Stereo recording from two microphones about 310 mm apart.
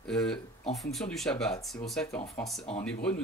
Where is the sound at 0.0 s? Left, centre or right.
Centre.